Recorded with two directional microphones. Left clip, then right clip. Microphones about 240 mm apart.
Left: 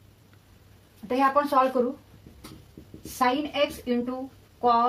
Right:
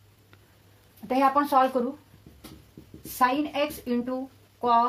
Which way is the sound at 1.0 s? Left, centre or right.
Right.